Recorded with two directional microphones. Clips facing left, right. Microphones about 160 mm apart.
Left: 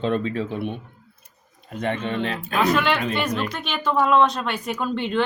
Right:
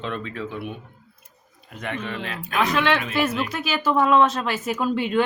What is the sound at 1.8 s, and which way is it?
Speech, 30° left (ahead or behind).